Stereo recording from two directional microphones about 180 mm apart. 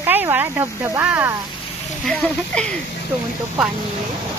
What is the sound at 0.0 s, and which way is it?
Speech, 10° right (ahead or behind).